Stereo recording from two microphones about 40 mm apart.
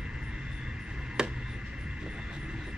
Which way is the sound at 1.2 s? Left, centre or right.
Centre.